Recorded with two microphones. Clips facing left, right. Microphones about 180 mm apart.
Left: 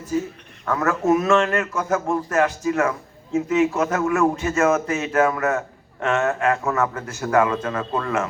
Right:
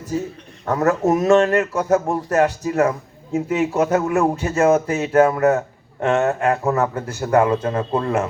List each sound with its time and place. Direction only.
0.6 s speech: 35° right (ahead or behind)